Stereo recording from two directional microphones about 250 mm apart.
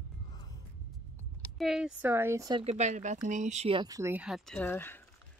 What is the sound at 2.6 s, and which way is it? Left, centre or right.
Speech, right.